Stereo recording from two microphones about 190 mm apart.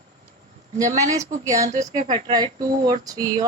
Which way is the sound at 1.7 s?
40° right (ahead or behind).